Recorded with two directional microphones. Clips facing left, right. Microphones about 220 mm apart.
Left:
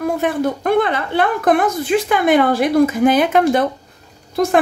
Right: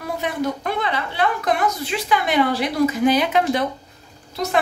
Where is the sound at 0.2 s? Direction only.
55° left (ahead or behind).